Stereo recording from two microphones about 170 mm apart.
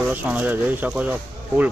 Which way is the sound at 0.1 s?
10° right (ahead or behind).